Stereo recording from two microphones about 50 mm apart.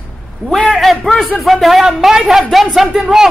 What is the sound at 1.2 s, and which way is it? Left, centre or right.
Speech, left.